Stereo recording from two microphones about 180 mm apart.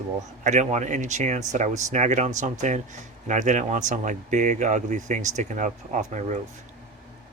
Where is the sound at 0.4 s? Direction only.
40° right (ahead or behind).